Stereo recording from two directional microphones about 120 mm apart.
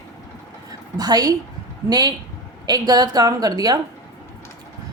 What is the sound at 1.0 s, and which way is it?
A woman's voice, 30° right (ahead or behind).